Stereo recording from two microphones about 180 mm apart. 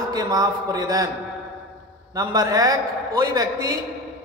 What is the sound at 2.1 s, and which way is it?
A man's voice, 20° right (ahead or behind).